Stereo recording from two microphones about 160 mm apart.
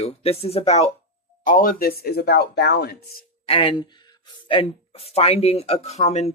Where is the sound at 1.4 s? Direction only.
55° left (ahead or behind); by 3.0 s 85° left.